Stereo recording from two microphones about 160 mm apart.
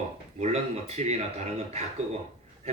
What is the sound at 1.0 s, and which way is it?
Speech, 40° right (ahead or behind).